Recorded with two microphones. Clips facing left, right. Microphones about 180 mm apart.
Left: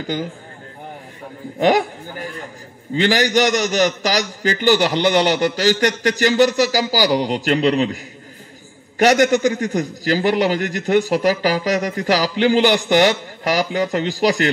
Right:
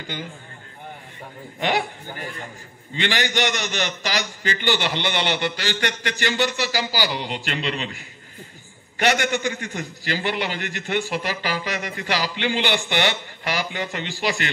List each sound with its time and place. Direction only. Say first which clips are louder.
0.0 s a man's voice: left 9 dB; 40° left (ahead or behind)
1.6 s a man's voice: left 8 dB; 45° left (ahead or behind)